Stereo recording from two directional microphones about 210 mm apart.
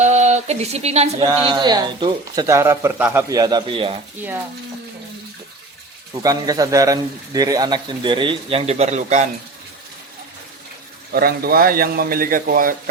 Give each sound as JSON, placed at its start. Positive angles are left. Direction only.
{"t": 0.0, "sound": "a sound", "side_deg": -35}
{"t": 1.4, "sound": "speech", "side_deg": -20}
{"t": 6.2, "sound": "speech", "side_deg": -15}
{"t": 11.1, "sound": "a man's voice", "side_deg": -45}